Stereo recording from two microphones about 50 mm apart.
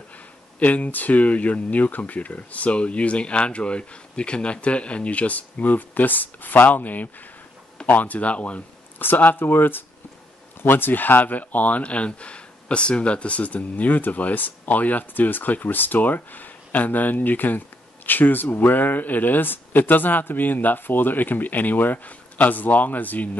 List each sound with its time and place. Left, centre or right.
0.6 s speech: left